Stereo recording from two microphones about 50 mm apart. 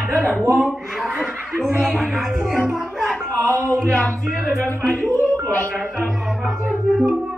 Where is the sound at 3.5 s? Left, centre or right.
Right.